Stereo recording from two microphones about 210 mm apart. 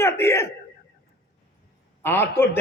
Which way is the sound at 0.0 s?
10° left (ahead or behind).